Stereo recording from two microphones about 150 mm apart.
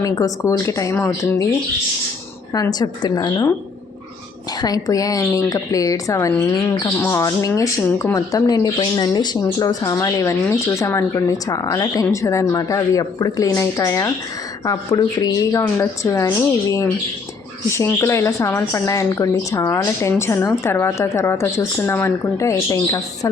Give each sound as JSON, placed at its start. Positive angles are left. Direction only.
{"t": 0.0, "sound": "speech", "side_deg": 20}
{"t": 2.5, "sound": "speech", "side_deg": 25}
{"t": 4.6, "sound": "a woman's voice", "side_deg": 25}